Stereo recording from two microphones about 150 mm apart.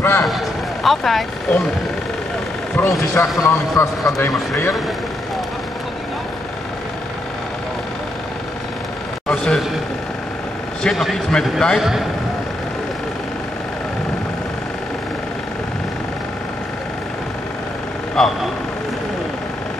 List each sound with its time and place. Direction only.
0.0 s a sound: 15° left (ahead or behind)
0.8 s a man's voice: centre (ahead or behind)
3.2 s a man's voice: 20° left (ahead or behind)
9.3 s a sound: 5° left (ahead or behind)
10.8 s a man's voice: centre (ahead or behind)
18.1 s speech: 5° left (ahead or behind)